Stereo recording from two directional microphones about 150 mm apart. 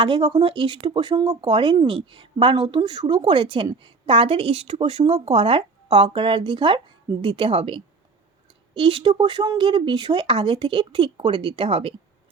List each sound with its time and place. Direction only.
0.0 s a woman's voice: 30° right (ahead or behind)